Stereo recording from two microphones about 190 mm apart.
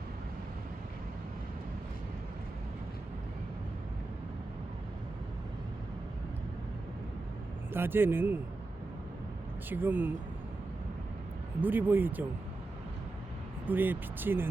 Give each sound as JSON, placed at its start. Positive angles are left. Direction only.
{"t": 7.7, "sound": "speech", "side_deg": -10}
{"t": 9.6, "sound": "speech", "side_deg": -10}
{"t": 11.6, "sound": "speech", "side_deg": -10}
{"t": 13.7, "sound": "speech", "side_deg": -10}